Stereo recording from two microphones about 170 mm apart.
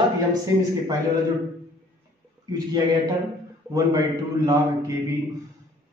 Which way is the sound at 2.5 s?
25° right (ahead or behind).